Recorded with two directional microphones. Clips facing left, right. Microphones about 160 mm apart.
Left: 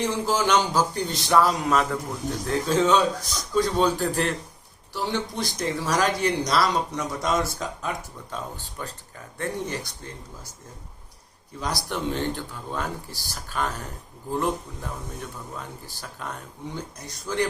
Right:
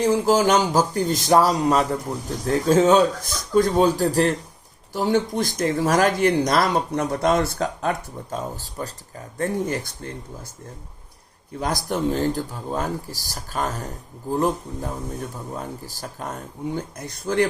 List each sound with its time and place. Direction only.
0.0 s speech: 40° right (ahead or behind)
2.6 s speech: 45° right (ahead or behind); by 7.9 s 60° right (ahead or behind)
8.3 s speech: 40° right (ahead or behind)
11.6 s speech: 45° right (ahead or behind)